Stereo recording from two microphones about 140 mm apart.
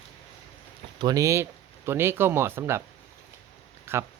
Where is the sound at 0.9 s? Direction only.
25° right (ahead or behind).